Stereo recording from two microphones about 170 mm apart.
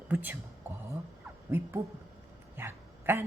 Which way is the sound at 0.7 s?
10° right (ahead or behind).